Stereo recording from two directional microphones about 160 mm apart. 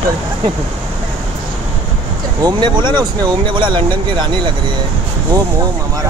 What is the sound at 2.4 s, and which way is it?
Speech, 30° right (ahead or behind).